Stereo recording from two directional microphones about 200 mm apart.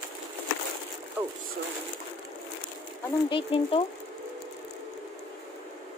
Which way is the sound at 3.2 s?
25° left (ahead or behind).